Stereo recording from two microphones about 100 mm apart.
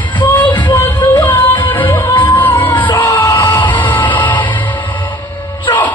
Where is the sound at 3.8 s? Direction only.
15° left (ahead or behind).